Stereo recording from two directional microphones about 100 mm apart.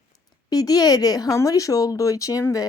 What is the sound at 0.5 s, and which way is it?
Speech, 40° left (ahead or behind).